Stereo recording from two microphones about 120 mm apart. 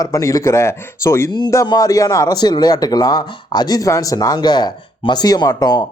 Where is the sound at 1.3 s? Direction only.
35° left (ahead or behind).